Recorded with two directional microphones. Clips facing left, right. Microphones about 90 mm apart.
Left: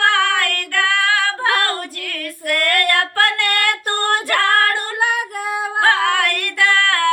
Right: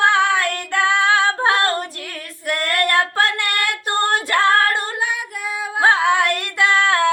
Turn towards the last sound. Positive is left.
turn(degrees=-20)  # may be behind; listen again after turning